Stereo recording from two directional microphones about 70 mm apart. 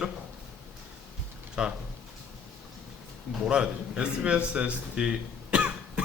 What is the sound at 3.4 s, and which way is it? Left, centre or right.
A man's voice, centre.